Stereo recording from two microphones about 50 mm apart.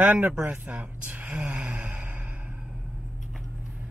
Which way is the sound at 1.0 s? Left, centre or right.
Right.